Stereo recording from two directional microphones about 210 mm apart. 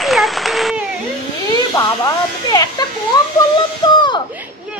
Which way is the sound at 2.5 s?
20° left (ahead or behind).